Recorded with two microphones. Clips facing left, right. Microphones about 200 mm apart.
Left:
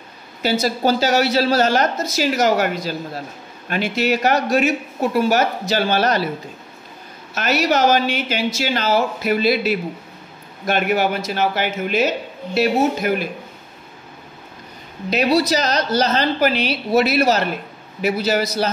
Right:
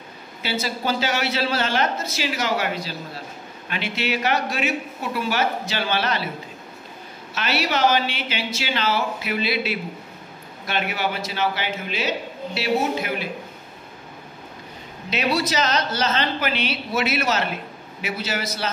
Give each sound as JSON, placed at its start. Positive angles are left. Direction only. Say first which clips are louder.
{"t": 0.4, "sound": "a woman's voice", "louder": "left 8 dB", "side_deg": 40}
{"t": 7.3, "sound": "a woman's voice", "louder": "left 6 dB", "side_deg": 45}
{"t": 15.0, "sound": "speech", "louder": "left 6 dB", "side_deg": 40}